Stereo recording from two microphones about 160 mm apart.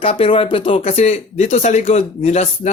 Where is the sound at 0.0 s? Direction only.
35° left (ahead or behind).